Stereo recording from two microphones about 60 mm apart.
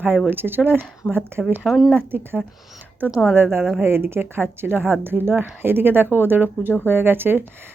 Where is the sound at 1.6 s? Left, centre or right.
Centre.